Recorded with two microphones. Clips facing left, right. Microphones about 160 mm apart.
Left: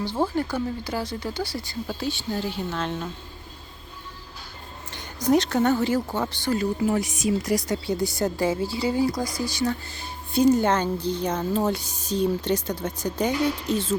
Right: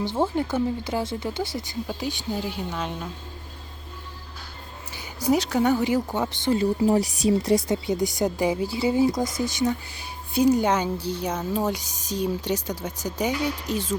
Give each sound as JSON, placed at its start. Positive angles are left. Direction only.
{"t": 0.0, "sound": "a woman's voice", "side_deg": -20}
{"t": 4.9, "sound": "a woman's voice", "side_deg": -10}